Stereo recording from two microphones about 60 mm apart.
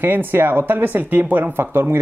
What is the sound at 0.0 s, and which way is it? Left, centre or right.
Speech, right.